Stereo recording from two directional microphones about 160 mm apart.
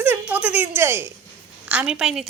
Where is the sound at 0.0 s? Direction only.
10° right (ahead or behind).